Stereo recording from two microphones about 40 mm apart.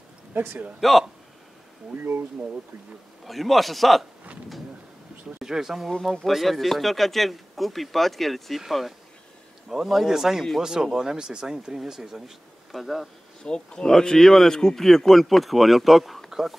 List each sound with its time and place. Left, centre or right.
0.7 s speech: centre
3.3 s speech: centre
5.4 s speech: centre
13.4 s speech: left; by 16.3 s centre
16.3 s a sound: centre